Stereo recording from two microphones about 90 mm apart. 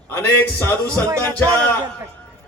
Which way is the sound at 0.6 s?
25° left (ahead or behind).